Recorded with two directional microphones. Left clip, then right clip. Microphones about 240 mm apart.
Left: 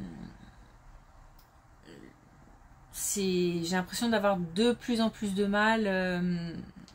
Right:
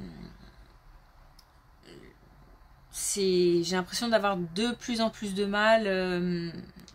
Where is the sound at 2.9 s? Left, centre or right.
Right.